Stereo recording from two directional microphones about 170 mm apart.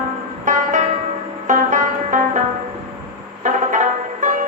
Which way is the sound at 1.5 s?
50° right (ahead or behind).